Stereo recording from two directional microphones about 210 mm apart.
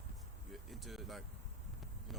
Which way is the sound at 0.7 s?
Centre (ahead or behind).